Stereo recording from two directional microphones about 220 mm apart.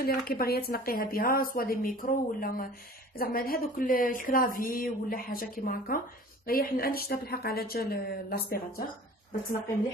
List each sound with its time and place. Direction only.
0.0 s speech: 45° left (ahead or behind)